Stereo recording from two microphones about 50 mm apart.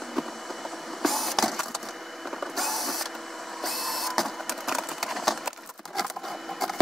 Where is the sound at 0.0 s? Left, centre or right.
Centre.